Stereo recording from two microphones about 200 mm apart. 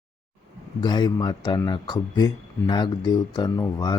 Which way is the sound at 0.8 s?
20° left (ahead or behind).